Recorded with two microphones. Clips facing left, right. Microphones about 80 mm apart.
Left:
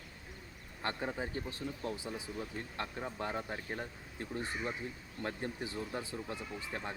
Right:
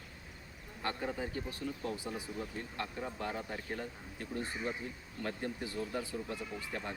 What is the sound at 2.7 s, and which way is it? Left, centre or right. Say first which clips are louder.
Speech: even; left.